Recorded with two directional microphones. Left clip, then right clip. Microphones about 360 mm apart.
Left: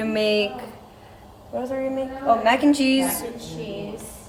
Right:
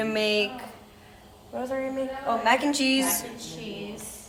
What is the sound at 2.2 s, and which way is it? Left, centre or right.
Speech, centre.